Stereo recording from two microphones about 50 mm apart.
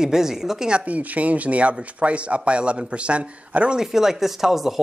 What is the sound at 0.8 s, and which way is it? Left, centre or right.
Speech, right.